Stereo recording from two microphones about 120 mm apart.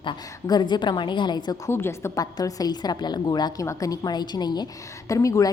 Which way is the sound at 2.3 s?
30° left (ahead or behind).